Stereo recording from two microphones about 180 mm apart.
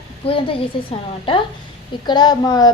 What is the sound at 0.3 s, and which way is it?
A woman's voice, 30° left (ahead or behind).